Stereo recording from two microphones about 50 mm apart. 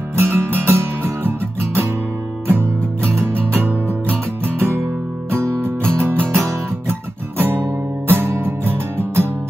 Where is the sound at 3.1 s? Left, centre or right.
Right.